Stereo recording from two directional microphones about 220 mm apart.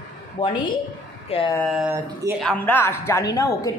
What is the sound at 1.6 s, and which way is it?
Speech, centre (ahead or behind).